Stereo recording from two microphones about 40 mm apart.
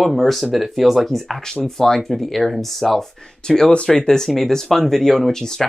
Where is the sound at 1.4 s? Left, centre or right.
Centre.